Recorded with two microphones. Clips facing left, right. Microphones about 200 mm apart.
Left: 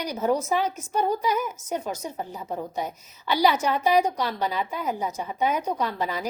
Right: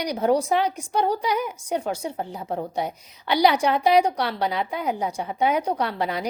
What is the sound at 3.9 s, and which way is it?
Speech, 70° right (ahead or behind).